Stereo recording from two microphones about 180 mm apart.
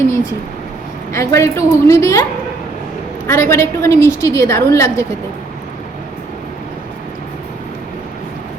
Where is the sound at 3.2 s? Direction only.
15° left (ahead or behind).